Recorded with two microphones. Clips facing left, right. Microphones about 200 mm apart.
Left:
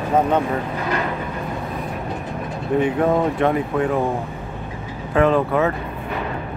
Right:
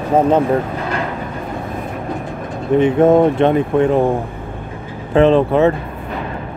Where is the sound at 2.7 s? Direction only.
25° right (ahead or behind).